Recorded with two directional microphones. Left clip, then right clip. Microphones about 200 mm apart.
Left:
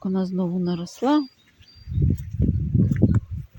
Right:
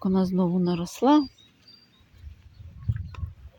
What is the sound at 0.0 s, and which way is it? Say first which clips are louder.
Speech: right 1 dB; 10° right (ahead or behind).